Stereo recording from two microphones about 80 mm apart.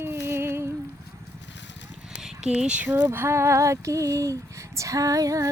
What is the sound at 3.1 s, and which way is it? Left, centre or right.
Female singing, right.